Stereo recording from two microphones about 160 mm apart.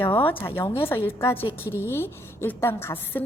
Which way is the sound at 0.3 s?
15° left (ahead or behind).